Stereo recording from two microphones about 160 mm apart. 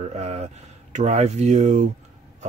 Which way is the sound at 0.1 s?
45° right (ahead or behind).